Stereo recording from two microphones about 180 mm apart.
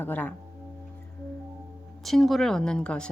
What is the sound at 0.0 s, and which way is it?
Speech, 10° left (ahead or behind).